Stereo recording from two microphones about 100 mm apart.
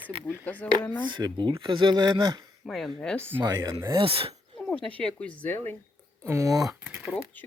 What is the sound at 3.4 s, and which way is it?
Speech, 40° right (ahead or behind).